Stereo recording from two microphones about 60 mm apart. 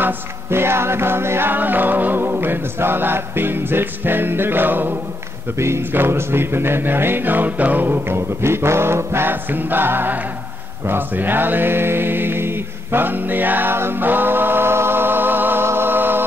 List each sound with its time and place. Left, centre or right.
0.0 s music: right
10.9 s mantra: right